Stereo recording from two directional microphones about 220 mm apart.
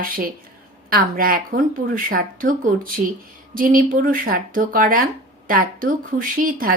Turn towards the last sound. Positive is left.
turn(degrees=-40)  # may be behind; listen again after turning